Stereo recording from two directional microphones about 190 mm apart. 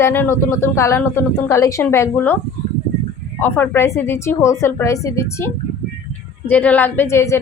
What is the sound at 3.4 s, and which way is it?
A woman's voice, 10° left (ahead or behind).